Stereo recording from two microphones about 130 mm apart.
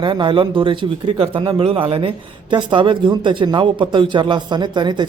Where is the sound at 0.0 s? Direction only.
40° right (ahead or behind).